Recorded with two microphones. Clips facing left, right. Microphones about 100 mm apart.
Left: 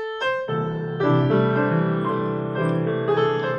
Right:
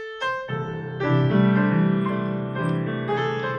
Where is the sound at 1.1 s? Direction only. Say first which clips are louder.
Right 1 dB; 15° left (ahead or behind).